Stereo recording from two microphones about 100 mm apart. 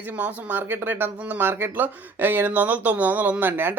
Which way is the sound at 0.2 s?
20° right (ahead or behind).